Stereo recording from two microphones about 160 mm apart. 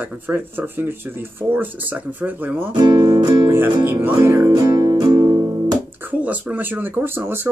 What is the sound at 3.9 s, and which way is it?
Speech, 15° right (ahead or behind).